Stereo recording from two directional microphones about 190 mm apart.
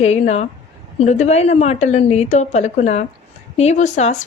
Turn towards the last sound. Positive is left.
turn(degrees=40)  # may be behind; listen again after turning